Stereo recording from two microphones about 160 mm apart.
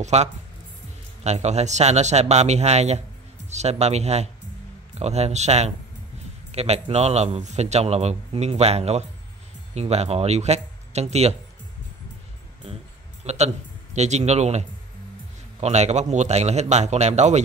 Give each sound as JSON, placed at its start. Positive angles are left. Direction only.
{"t": 0.0, "sound": "a man's voice", "side_deg": -45}
{"t": 13.2, "sound": "a man's voice", "side_deg": -45}